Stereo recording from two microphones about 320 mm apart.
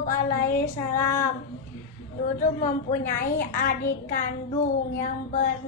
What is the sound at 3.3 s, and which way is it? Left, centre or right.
A woman's voice, left.